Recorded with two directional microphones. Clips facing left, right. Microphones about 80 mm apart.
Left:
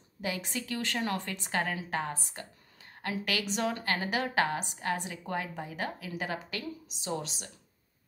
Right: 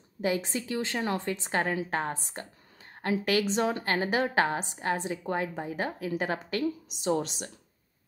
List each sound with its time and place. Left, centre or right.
0.2 s a woman's voice: right